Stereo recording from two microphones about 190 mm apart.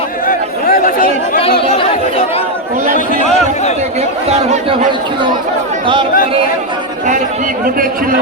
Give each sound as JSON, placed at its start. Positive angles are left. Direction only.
{"t": 0.3, "sound": "chatter", "side_deg": 45}
{"t": 1.4, "sound": "chatter", "side_deg": 30}
{"t": 4.3, "sound": "speech", "side_deg": -35}